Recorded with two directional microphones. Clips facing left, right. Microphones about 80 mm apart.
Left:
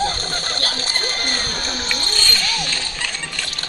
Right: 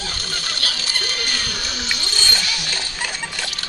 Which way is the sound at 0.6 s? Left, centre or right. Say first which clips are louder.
Left 2 dB; left.